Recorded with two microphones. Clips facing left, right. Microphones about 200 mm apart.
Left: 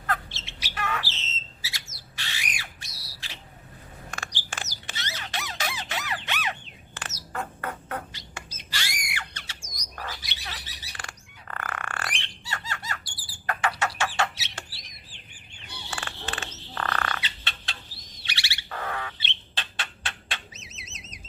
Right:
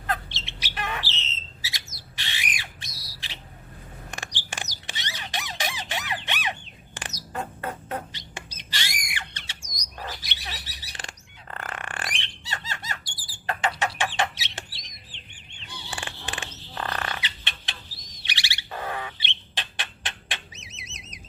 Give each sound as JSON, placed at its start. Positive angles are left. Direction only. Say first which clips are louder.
{"t": 0.1, "sound": "bird", "louder": "even", "side_deg": -20}
{"t": 4.1, "sound": "squeak", "louder": "even", "side_deg": -15}
{"t": 12.5, "sound": "squeal", "louder": "left 1 dB", "side_deg": -20}
{"t": 13.5, "sound": "bird", "louder": "right 1 dB", "side_deg": -25}
{"t": 15.5, "sound": "frog", "louder": "right 1 dB", "side_deg": -15}
{"t": 18.2, "sound": "bird", "louder": "right 1 dB", "side_deg": -15}